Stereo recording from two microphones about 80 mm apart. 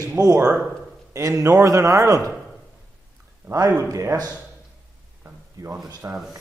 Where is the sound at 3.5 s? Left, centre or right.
Right.